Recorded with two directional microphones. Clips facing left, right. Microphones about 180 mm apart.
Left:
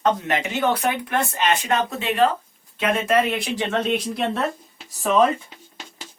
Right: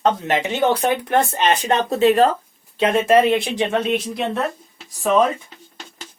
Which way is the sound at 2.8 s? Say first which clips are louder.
Right 5 dB; 30° right (ahead or behind).